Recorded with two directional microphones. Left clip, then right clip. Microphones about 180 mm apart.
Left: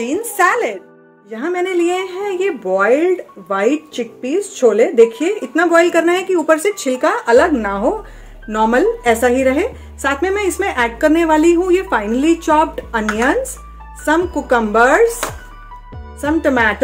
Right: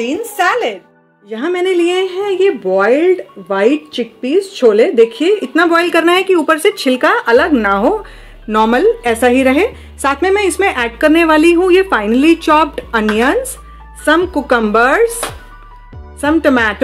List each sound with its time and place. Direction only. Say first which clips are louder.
0.0 s speech: even; 30° right (ahead or behind)
16.2 s speech: right 3 dB; 35° right (ahead or behind)